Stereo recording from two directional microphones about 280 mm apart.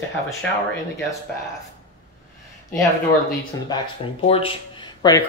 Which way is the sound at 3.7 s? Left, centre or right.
Centre.